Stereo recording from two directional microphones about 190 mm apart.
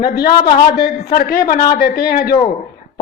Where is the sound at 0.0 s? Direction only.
55° left (ahead or behind).